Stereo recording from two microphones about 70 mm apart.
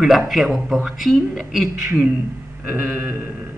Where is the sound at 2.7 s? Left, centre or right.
Right.